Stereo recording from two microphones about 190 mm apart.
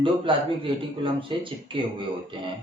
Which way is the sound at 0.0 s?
25° right (ahead or behind).